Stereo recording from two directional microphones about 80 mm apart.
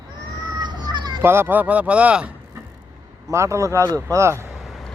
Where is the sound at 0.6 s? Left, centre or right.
Right.